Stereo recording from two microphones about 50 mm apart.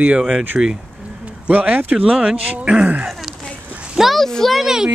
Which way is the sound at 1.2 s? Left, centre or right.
Right.